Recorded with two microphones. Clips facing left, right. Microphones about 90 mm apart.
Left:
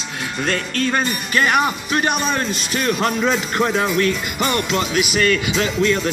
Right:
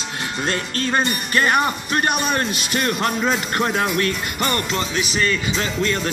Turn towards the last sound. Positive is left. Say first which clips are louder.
# left 4 dB
turn(degrees=0)  # may be behind; listen again after turning